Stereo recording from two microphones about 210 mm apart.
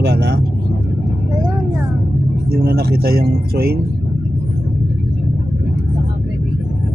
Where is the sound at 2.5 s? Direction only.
50° right (ahead or behind).